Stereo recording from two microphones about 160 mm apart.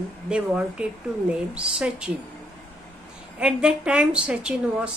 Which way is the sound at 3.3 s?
5° right (ahead or behind).